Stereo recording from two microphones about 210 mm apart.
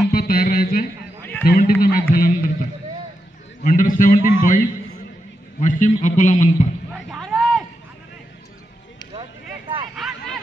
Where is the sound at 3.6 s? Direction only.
40° left (ahead or behind).